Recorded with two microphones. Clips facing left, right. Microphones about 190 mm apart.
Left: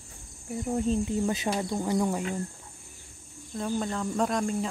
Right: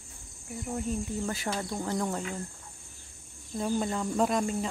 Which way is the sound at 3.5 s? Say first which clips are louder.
Right 1 dB; 5° right (ahead or behind).